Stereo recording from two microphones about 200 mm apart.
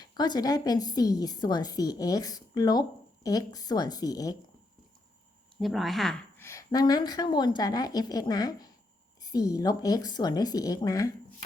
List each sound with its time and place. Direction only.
0.0 s a woman's voice: 20° left (ahead or behind)
5.5 s a woman's voice: centre (ahead or behind)
6.4 s a woman's voice: 15° left (ahead or behind)